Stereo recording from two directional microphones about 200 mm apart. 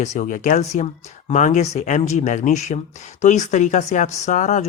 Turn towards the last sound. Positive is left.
turn(degrees=35)  # may be behind; listen again after turning